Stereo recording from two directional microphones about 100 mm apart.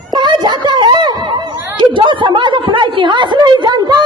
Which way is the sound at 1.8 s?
55° right (ahead or behind).